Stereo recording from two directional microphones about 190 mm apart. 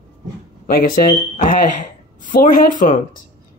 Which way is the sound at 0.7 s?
50° left (ahead or behind).